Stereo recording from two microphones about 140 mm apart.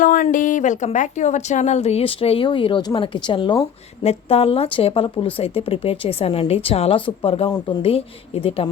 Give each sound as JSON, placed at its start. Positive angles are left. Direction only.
{"t": 0.0, "sound": "speech", "side_deg": 70}